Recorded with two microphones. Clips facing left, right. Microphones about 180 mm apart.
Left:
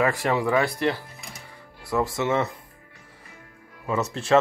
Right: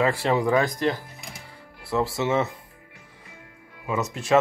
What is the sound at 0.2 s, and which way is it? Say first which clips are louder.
Speech: right 1 dB; 25° right (ahead or behind).